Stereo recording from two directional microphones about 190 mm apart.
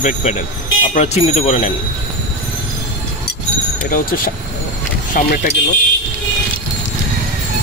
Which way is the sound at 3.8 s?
50° left (ahead or behind).